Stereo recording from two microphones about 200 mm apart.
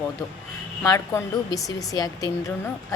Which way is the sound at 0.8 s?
15° left (ahead or behind).